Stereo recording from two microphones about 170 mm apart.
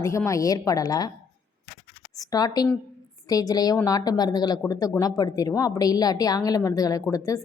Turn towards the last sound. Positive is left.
turn(degrees=20)  # may be behind; listen again after turning